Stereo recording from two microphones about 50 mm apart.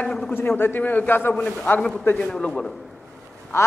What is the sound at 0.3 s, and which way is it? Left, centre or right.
A man's voice, left.